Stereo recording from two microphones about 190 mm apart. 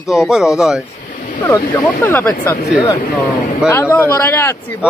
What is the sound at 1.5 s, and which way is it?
Speech, 10° left (ahead or behind).